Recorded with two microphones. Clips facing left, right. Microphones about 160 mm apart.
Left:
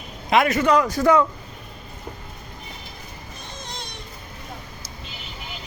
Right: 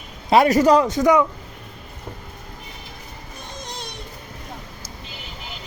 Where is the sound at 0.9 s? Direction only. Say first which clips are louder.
Right 1 dB; 20° right (ahead or behind).